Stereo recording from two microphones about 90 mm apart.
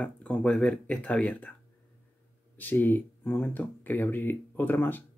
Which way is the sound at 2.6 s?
20° left (ahead or behind).